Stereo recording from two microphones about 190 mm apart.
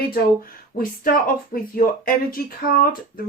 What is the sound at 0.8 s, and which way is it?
Speech, 50° left (ahead or behind).